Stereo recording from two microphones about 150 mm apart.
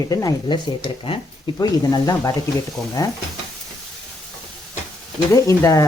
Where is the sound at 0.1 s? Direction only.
25° left (ahead or behind).